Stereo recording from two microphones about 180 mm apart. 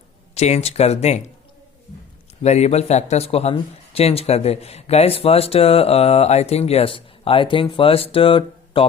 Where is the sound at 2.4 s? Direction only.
40° left (ahead or behind).